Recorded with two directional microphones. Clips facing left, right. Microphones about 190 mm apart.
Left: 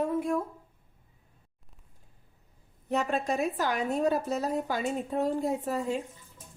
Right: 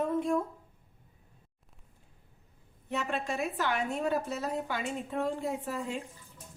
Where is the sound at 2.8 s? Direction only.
40° left (ahead or behind).